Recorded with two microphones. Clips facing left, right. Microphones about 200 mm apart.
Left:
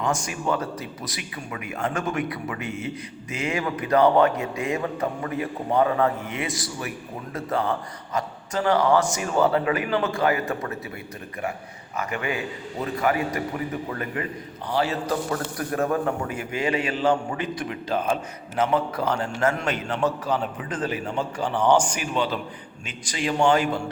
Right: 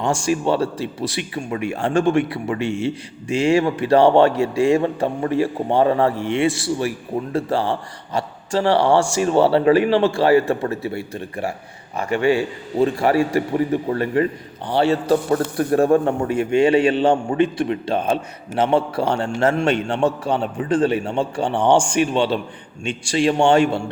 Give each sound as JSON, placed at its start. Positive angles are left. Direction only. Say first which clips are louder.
{"t": 0.0, "sound": "a man's voice", "louder": "right 7 dB", "side_deg": -30}